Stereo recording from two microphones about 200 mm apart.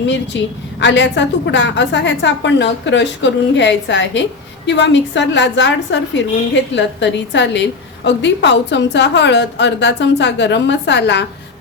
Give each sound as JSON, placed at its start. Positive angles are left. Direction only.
{"t": 0.3, "sound": "a woman's voice", "side_deg": 65}